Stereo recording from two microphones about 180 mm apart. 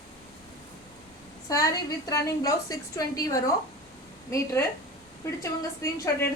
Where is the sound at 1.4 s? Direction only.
20° left (ahead or behind).